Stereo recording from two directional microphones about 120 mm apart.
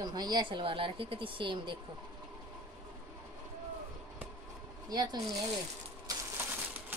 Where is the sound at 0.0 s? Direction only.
35° right (ahead or behind).